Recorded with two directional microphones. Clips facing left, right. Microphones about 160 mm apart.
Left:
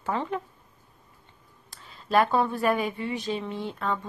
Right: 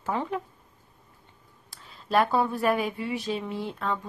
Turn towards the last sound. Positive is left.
turn(degrees=0)  # may be behind; listen again after turning